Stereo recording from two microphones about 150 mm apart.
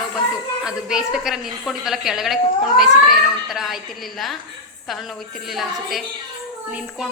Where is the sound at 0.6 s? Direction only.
5° right (ahead or behind).